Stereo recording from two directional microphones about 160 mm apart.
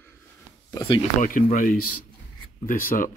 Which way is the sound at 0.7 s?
30° left (ahead or behind).